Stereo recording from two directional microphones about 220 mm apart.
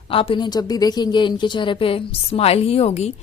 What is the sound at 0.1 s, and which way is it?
Speech, 25° left (ahead or behind).